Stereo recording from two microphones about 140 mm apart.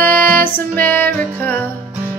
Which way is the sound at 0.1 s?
90° right.